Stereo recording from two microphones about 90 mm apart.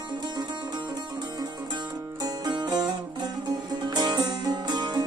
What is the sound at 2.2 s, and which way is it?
Music, 50° right (ahead or behind).